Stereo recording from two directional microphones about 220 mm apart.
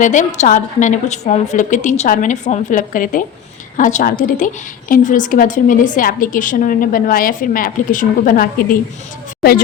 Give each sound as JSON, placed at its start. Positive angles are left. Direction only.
{"t": 0.0, "sound": "a woman's voice", "side_deg": 35}